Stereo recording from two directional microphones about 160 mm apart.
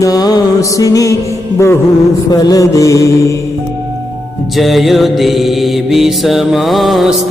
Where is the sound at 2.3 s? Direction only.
20° left (ahead or behind).